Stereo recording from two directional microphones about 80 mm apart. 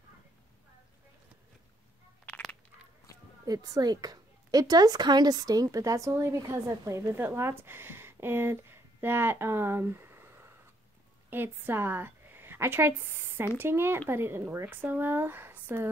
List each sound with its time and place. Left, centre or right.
3.4 s a woman's voice: right
7.2 s a woman's voice: right